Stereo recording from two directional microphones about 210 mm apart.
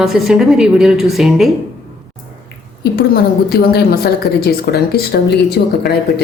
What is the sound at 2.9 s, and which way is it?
A woman's voice, 45° left (ahead or behind).